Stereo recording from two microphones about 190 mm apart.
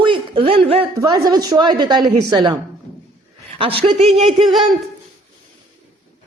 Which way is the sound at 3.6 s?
30° right (ahead or behind).